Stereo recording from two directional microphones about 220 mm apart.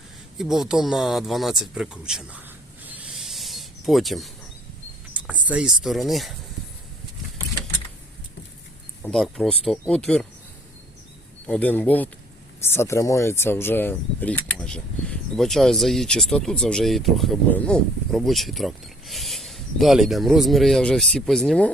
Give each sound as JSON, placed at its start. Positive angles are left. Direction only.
{"t": 0.3, "sound": "speech", "side_deg": 0}
{"t": 2.8, "sound": "a sound", "side_deg": -5}
{"t": 5.1, "sound": "cricket", "side_deg": -5}
{"t": 5.5, "sound": "speech", "side_deg": -5}
{"t": 9.0, "sound": "speech", "side_deg": 0}
{"t": 11.4, "sound": "speech", "side_deg": 5}